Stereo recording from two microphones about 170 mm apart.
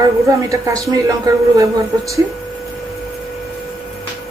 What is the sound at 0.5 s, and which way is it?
Speech, 20° right (ahead or behind).